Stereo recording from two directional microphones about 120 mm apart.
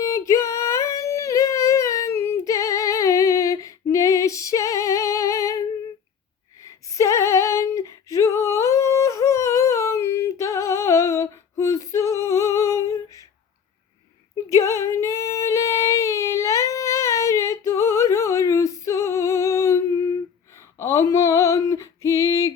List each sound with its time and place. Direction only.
0.0 s singing: 25° left (ahead or behind)
6.6 s female singing: 30° left (ahead or behind)
14.5 s female singing: 25° left (ahead or behind)